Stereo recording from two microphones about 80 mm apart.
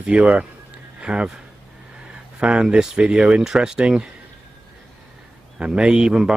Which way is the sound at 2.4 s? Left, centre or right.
Centre.